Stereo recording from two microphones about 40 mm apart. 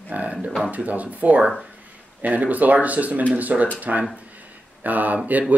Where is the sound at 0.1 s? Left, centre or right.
Right.